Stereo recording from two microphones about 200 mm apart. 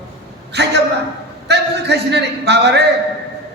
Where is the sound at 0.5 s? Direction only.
55° right (ahead or behind).